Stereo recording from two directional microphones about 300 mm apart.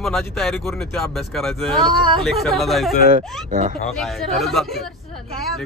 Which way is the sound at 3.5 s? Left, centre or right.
Right.